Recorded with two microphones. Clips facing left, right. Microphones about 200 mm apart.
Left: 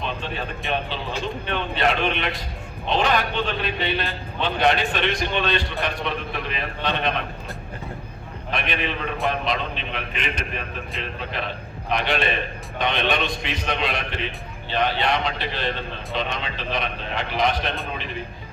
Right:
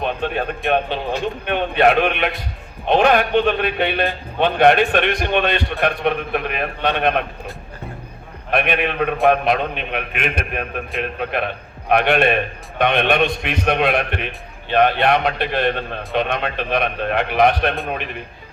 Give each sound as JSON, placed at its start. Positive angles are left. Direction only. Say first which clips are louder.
{"t": 0.0, "sound": "a sound", "louder": "right 7 dB", "side_deg": -55}
{"t": 1.5, "sound": "a man's voice", "louder": "right 8 dB", "side_deg": -55}
{"t": 8.4, "sound": "a man's voice", "louder": "right 7 dB", "side_deg": -60}